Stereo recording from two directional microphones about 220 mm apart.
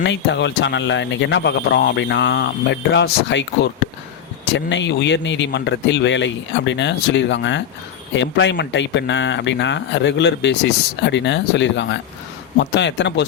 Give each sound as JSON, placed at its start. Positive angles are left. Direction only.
{"t": 0.0, "sound": "speech", "side_deg": 55}